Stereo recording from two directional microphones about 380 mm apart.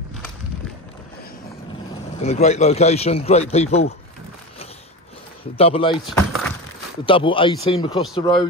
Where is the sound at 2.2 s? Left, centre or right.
Centre.